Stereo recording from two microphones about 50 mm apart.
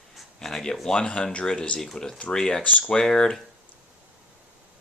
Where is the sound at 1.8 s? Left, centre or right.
Centre.